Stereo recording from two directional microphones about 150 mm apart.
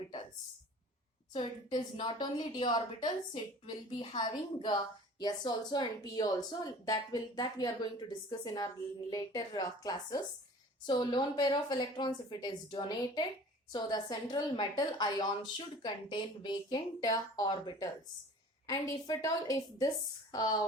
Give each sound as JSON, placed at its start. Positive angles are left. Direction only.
{"t": 1.7, "sound": "speech", "side_deg": 30}